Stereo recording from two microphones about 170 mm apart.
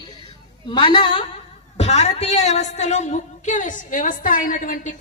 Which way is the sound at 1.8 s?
40° left (ahead or behind).